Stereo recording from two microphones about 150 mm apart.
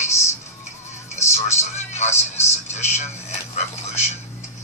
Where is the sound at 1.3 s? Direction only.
50° left (ahead or behind).